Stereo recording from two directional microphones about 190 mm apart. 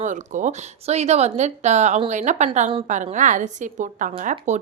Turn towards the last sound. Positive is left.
turn(degrees=-35)  # may be behind; listen again after turning